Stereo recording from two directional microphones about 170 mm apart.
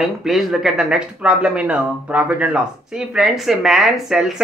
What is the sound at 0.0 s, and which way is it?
Speech, centre (ahead or behind).